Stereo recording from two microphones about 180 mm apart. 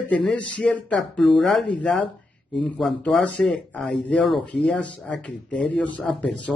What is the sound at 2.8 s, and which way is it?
Speech, centre (ahead or behind).